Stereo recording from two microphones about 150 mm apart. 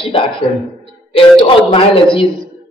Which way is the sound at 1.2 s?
35° left (ahead or behind).